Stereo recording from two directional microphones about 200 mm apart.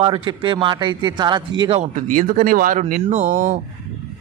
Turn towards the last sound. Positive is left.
turn(degrees=-40)  # may be behind; listen again after turning